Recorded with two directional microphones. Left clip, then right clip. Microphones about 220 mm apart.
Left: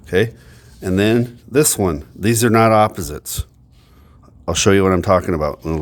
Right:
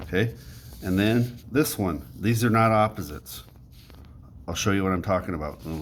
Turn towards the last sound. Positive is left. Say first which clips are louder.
# left 13 dB
turn(degrees=50)  # may be behind; listen again after turning